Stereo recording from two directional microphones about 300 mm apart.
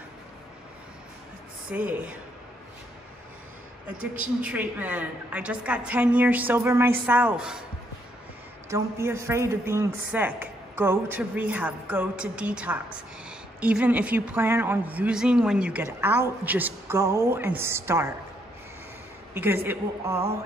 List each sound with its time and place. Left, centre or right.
1.7 s a woman's voice: centre
4.2 s a woman's voice: centre
8.6 s a woman's voice: centre
19.3 s a woman's voice: centre